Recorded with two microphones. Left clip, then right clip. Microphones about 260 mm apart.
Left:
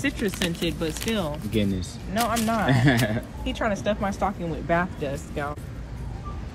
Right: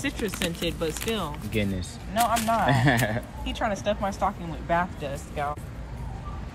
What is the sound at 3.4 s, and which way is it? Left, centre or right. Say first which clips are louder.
A woman's voice: left 1 dB; centre.